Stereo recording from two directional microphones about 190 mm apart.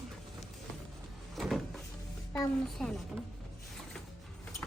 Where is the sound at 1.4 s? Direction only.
Centre (ahead or behind).